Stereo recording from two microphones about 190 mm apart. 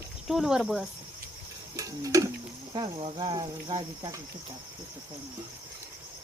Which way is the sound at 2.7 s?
25° right (ahead or behind).